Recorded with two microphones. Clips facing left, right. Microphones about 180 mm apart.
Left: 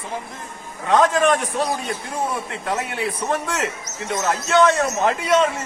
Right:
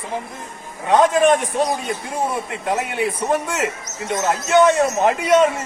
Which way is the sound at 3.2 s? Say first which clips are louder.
Right 1 dB; 15° right (ahead or behind).